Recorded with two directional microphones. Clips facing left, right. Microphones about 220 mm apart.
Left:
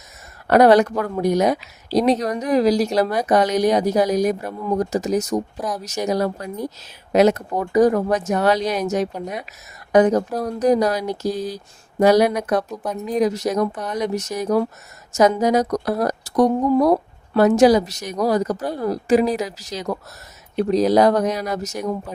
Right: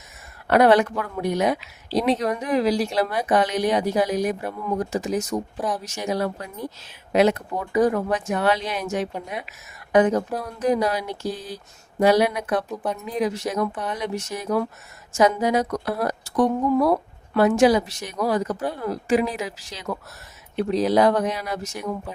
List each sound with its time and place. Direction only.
0.4 s speech: 40° left (ahead or behind)
5.5 s a woman's voice: 5° right (ahead or behind)
5.8 s speech: 40° left (ahead or behind)
12.7 s a woman's voice: centre (ahead or behind)
13.1 s speech: 40° left (ahead or behind)